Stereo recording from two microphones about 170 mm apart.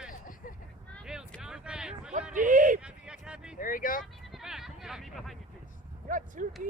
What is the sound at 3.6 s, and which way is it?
Speech, 55° left (ahead or behind).